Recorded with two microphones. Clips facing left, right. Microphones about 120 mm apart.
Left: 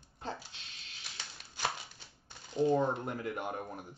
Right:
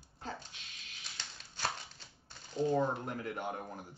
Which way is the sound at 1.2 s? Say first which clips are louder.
Left 2 dB; 10° left (ahead or behind).